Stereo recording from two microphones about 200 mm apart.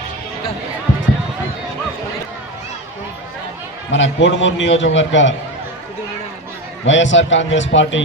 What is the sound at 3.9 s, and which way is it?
A man's voice, 70° left (ahead or behind).